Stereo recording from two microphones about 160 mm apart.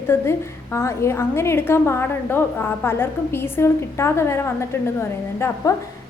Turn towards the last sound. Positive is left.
turn(degrees=15)  # may be behind; listen again after turning